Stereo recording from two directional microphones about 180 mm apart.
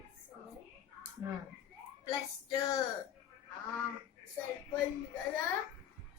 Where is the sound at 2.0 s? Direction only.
20° left (ahead or behind).